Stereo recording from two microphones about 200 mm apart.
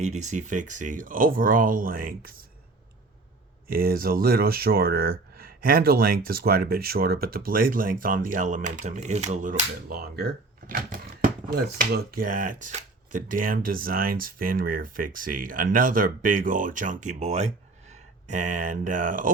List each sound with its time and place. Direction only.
0.0 s speech: 35° right (ahead or behind)
3.7 s speech: 45° right (ahead or behind)